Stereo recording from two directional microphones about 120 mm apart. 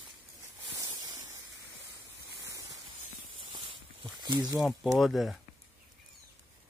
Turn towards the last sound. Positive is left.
turn(degrees=0)  # may be behind; listen again after turning